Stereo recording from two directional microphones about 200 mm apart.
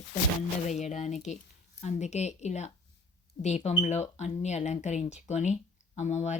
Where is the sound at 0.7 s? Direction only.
35° left (ahead or behind).